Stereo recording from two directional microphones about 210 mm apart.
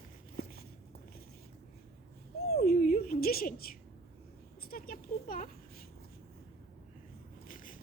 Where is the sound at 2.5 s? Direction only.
45° left (ahead or behind).